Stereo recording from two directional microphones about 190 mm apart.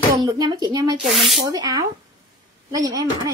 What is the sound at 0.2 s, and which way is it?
Speech, 20° right (ahead or behind).